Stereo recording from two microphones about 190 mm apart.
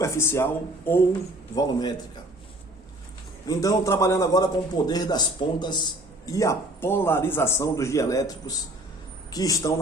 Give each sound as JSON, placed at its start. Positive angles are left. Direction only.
{"t": 0.0, "sound": "a man's voice", "side_deg": 15}
{"t": 3.4, "sound": "a man's voice", "side_deg": 20}